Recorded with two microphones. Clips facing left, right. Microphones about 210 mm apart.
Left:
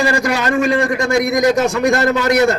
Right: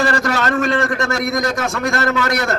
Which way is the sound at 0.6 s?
Centre (ahead or behind).